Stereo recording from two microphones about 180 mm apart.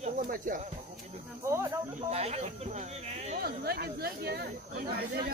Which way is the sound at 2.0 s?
35° right (ahead or behind).